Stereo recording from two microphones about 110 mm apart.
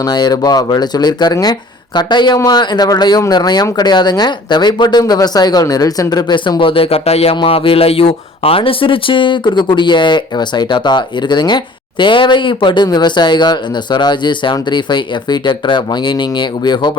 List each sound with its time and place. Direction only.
0.0 s speech: 40° left (ahead or behind); by 7.3 s 70° left (ahead or behind)
7.3 s speech: 55° left (ahead or behind)